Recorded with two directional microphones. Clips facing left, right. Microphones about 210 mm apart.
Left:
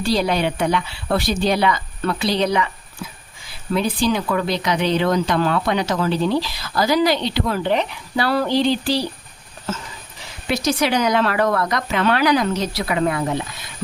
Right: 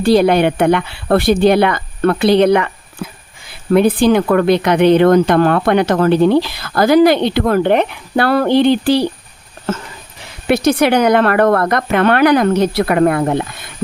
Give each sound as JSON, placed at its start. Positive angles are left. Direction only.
{"t": 0.0, "sound": "speech", "side_deg": -60}